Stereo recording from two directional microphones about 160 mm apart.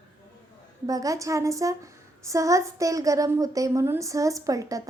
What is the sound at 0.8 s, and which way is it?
A woman's voice, 20° right (ahead or behind).